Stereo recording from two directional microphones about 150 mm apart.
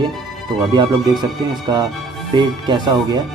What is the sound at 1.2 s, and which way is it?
Speech, 25° right (ahead or behind).